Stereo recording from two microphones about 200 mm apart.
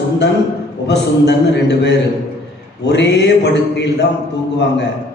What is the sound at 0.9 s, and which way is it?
A man's voice, 60° left (ahead or behind).